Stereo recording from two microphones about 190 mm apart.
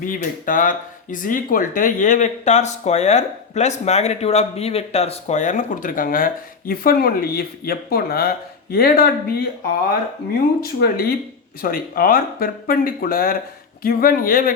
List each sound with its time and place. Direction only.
0.0 s speech: 45° left (ahead or behind)
10.6 s speech: 50° left (ahead or behind)